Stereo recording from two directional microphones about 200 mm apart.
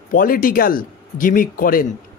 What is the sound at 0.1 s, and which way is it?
A man's voice, 45° left (ahead or behind).